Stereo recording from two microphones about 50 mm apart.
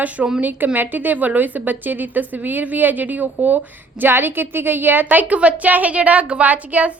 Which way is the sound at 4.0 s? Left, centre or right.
Right.